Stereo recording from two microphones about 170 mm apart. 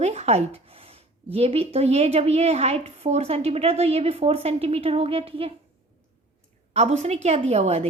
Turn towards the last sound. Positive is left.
turn(degrees=-35)  # may be behind; listen again after turning